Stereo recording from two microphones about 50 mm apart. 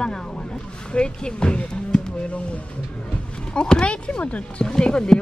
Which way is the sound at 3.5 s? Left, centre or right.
Centre.